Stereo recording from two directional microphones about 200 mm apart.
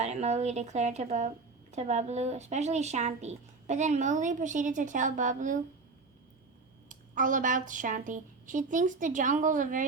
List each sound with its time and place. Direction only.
0.0 s speech: 35° right (ahead or behind)
6.8 s speech: 40° right (ahead or behind)